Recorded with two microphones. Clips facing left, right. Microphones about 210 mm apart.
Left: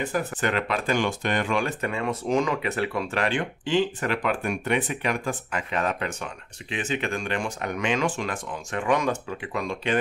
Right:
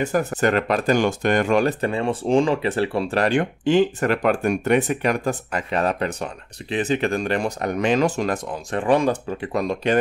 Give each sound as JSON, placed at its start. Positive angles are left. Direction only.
{"t": 0.0, "sound": "speech", "side_deg": -45}